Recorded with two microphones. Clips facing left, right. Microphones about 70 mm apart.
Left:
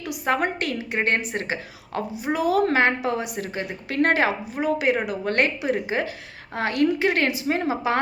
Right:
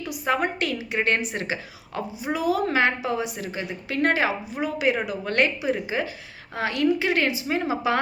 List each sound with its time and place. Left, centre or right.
0.3 s a woman's voice: left
7.4 s a woman's voice: left